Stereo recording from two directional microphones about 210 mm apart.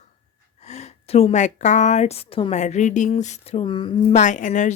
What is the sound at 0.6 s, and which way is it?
A woman's voice, 35° left (ahead or behind).